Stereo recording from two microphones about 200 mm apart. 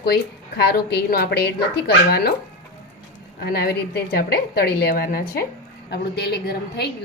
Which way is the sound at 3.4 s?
50° left (ahead or behind).